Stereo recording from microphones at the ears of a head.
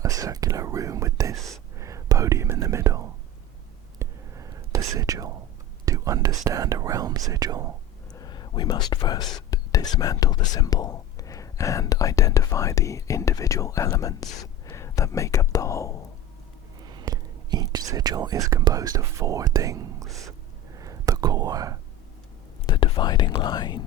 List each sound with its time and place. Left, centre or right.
0.0 s whispering: right
8.2 s speech: left
16.8 s speech: right
20.7 s whispering: right
22.6 s speech: left